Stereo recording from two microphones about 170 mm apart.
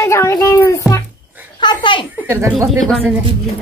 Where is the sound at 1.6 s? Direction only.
25° left (ahead or behind).